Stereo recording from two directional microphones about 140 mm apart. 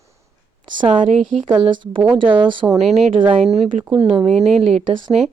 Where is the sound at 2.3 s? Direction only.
35° right (ahead or behind).